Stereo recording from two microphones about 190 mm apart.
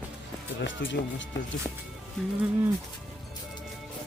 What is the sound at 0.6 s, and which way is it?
Speech, 80° left.